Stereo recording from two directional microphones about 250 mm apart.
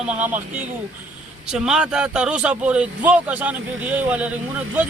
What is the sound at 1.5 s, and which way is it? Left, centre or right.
Speech, centre.